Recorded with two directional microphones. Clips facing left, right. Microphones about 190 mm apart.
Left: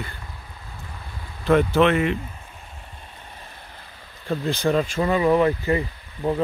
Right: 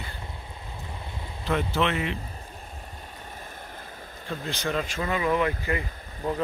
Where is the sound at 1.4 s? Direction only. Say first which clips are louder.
Left 9 dB; 55° left (ahead or behind).